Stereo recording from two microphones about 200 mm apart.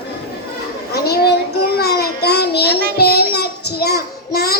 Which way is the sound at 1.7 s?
50° left (ahead or behind).